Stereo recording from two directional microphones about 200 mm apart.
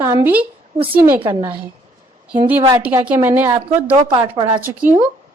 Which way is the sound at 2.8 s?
10° right (ahead or behind).